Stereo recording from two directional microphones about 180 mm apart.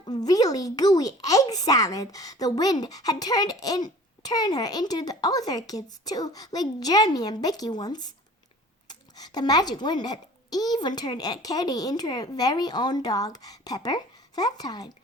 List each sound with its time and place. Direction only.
0.0 s a child's voice: 20° left (ahead or behind)